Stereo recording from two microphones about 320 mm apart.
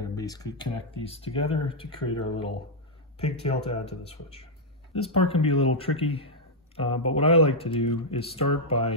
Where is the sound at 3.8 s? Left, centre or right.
Centre.